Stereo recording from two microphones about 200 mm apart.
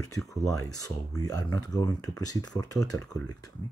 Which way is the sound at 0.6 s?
15° left (ahead or behind).